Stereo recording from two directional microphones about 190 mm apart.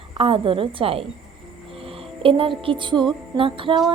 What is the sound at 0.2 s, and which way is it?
Speech, 30° right (ahead or behind).